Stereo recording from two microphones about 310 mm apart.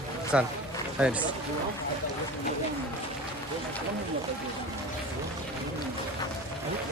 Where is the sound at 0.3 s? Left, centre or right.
Centre.